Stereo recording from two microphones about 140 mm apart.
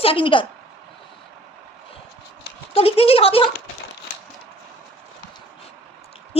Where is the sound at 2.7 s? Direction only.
40° left (ahead or behind).